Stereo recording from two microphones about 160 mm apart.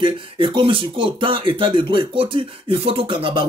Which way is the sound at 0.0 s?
30° right (ahead or behind).